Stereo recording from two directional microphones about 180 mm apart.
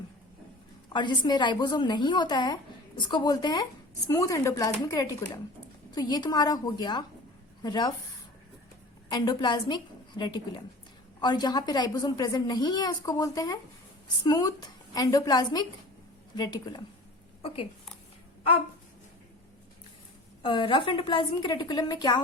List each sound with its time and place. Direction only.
0.9 s speech: 25° left (ahead or behind)
9.0 s a woman's voice: 25° left (ahead or behind)
20.4 s speech: 25° left (ahead or behind)